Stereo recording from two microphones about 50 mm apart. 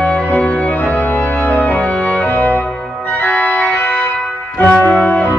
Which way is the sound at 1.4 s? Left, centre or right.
Left.